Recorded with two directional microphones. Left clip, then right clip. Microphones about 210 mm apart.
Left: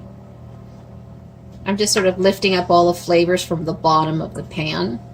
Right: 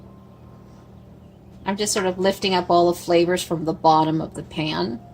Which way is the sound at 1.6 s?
25° right (ahead or behind).